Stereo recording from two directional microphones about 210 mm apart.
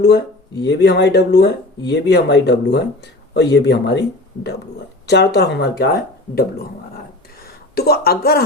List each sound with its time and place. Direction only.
0.6 s speech: 55° left (ahead or behind)
5.0 s speech: 50° left (ahead or behind)
7.8 s speech: 50° left (ahead or behind)